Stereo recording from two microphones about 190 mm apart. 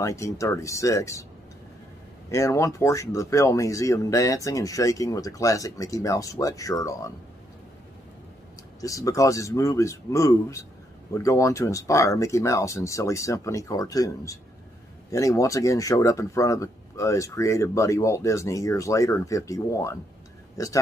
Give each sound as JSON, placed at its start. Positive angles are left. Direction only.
{"t": 0.0, "sound": "speech", "side_deg": 15}
{"t": 2.3, "sound": "speech", "side_deg": 15}
{"t": 8.8, "sound": "speech", "side_deg": 15}